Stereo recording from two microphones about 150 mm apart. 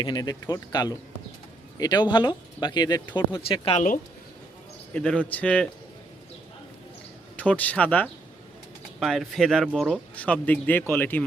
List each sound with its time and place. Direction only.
0.0 s speech: 25° left (ahead or behind)
4.9 s speech: 10° left (ahead or behind)
7.3 s speech: 10° left (ahead or behind)